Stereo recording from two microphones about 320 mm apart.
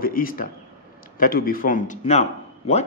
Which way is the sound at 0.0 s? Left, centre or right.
Left.